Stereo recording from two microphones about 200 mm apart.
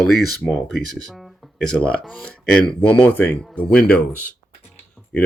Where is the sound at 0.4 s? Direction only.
Centre (ahead or behind).